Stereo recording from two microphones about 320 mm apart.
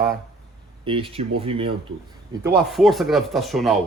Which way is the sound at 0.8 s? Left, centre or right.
Centre.